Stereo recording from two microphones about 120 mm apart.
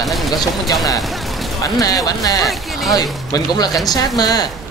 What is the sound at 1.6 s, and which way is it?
Speech, 30° left (ahead or behind).